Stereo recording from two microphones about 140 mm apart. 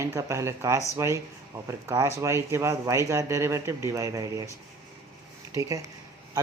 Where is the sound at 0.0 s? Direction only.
20° right (ahead or behind).